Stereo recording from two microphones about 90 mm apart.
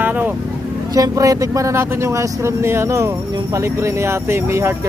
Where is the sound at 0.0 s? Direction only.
20° right (ahead or behind).